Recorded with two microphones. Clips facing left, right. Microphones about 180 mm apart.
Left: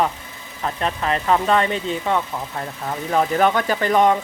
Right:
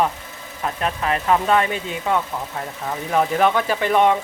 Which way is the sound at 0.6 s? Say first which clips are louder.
Even; 5° right (ahead or behind).